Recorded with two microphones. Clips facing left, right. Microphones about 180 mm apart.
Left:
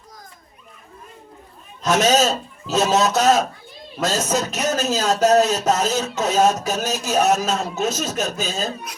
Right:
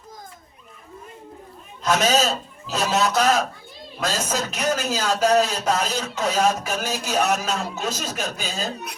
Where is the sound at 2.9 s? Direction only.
40° left (ahead or behind).